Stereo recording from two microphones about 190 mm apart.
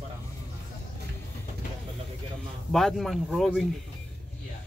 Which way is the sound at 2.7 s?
Centre (ahead or behind).